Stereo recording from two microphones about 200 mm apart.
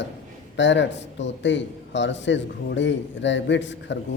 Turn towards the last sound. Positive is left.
turn(degrees=65)  # may be behind; listen again after turning